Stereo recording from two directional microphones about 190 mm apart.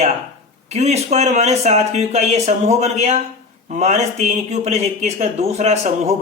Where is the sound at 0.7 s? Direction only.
35° right (ahead or behind).